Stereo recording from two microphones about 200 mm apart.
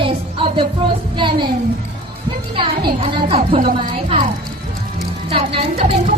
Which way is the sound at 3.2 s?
30° right (ahead or behind).